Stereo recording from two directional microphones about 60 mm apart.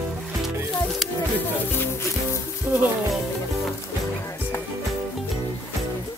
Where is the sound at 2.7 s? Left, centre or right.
Right.